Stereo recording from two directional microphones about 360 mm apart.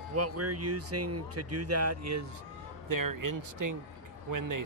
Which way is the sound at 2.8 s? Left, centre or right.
Right.